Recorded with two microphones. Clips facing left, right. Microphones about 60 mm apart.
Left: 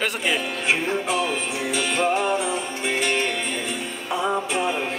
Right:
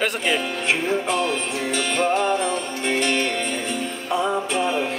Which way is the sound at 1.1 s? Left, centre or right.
Centre.